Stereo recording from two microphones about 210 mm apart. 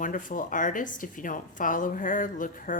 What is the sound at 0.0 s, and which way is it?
Speech, 40° left (ahead or behind).